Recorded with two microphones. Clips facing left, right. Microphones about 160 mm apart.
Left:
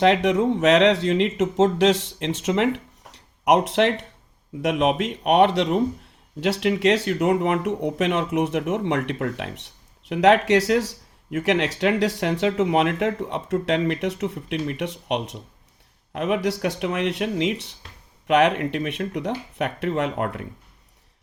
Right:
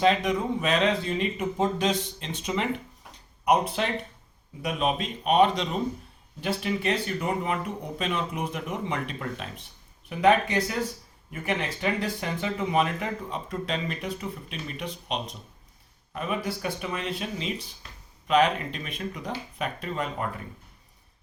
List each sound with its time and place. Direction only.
0.0 s speech: 75° left (ahead or behind)